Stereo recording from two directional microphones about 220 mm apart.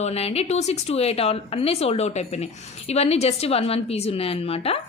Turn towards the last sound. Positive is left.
turn(degrees=25)  # may be behind; listen again after turning